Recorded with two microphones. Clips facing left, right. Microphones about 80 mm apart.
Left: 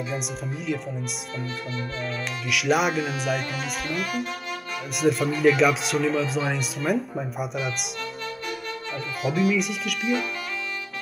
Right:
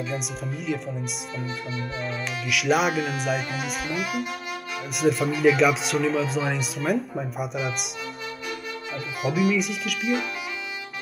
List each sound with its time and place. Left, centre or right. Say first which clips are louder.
2.5 s speech: even; centre
9.2 s speech: even; centre